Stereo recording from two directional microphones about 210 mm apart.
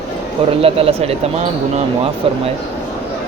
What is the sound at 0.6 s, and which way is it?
Speech, 30° right (ahead or behind).